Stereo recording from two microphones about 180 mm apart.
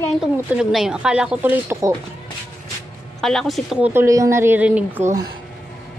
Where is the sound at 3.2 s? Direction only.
Centre (ahead or behind).